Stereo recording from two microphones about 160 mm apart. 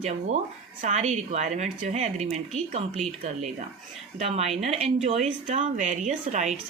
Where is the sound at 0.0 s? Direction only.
45° right (ahead or behind).